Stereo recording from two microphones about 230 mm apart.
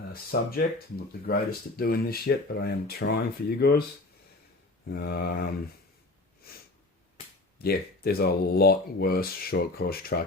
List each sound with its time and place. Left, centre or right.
0.1 s speech: left
4.9 s speech: left
7.6 s speech: left